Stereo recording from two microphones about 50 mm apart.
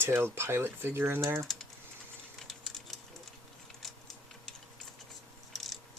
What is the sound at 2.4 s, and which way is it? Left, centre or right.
Typing, centre.